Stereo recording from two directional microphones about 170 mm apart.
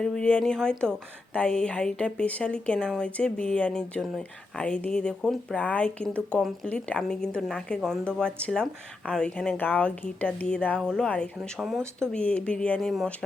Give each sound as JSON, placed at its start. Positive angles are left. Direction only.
{"t": 0.0, "sound": "a woman's voice", "side_deg": 5}
{"t": 11.8, "sound": "speech", "side_deg": -15}
{"t": 12.1, "sound": "speech", "side_deg": 5}